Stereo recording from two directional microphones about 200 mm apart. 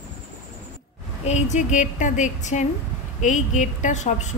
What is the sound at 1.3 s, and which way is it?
A woman's voice, 35° left (ahead or behind).